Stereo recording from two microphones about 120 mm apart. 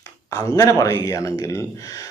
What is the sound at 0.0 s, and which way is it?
Speech, 25° left (ahead or behind).